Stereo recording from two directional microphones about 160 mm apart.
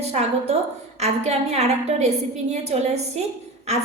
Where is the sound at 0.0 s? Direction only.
40° right (ahead or behind).